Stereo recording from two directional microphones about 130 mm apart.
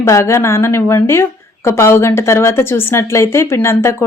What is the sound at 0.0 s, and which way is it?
A woman's voice, 20° left (ahead or behind).